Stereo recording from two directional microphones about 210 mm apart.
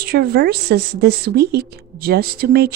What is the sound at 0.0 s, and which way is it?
Speech, 45° right (ahead or behind).